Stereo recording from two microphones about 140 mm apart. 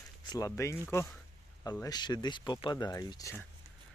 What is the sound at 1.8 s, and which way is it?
Speech, 30° left (ahead or behind).